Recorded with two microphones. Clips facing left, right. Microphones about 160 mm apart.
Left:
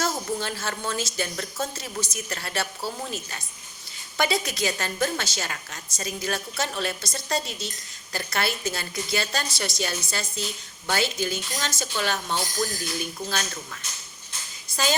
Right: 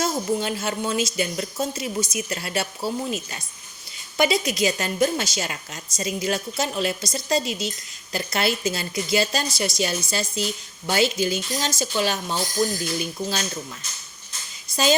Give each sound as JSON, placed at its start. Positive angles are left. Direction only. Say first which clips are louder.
{"t": 0.0, "sound": "a woman's voice", "louder": "right 4 dB", "side_deg": -20}